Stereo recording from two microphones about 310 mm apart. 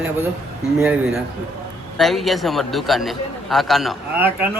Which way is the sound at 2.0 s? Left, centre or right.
Centre.